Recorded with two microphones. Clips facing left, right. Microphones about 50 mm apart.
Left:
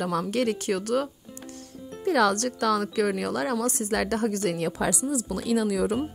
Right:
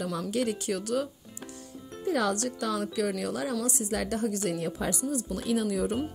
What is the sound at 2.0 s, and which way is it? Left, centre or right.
Speech, left.